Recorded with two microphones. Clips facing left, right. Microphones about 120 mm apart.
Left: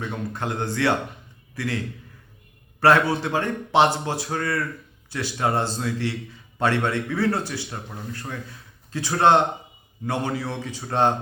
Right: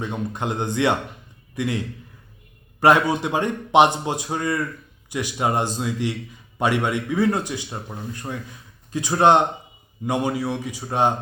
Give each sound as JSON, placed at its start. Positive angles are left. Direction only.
{"t": 0.3, "sound": "a man's voice", "side_deg": -20}
{"t": 2.8, "sound": "a man's voice", "side_deg": -15}